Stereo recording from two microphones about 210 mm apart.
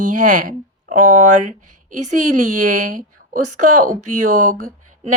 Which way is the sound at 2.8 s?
40° right (ahead or behind).